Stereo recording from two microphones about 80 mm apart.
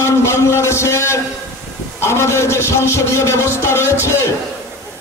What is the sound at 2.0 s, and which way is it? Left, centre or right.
A man's voice, left.